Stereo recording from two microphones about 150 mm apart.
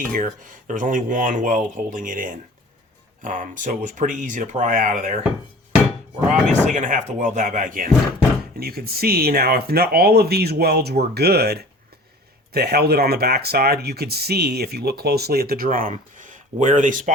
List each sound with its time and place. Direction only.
0.1 s speech: 65° right (ahead or behind)
6.5 s speech: 55° right (ahead or behind)
8.5 s speech: 90° right; by 15.9 s 70° right (ahead or behind)
16.1 s a sound: 60° right (ahead or behind)